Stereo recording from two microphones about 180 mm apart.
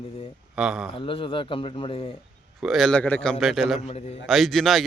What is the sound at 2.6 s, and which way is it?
Speech, centre (ahead or behind).